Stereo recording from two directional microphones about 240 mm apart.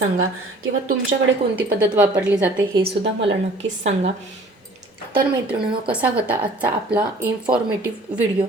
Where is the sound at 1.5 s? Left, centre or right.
Centre.